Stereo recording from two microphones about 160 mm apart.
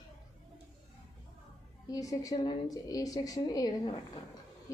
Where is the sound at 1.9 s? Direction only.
20° left (ahead or behind).